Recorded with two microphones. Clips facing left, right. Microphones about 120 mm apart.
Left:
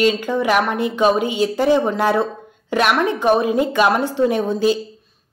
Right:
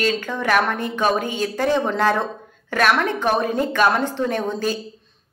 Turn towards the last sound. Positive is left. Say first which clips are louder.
# left 5 dB
turn(degrees=15)  # may be behind; listen again after turning